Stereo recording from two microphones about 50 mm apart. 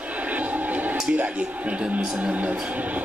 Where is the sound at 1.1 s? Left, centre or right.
Right.